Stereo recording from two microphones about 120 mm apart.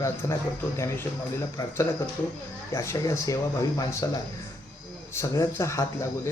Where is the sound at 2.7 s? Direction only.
25° left (ahead or behind).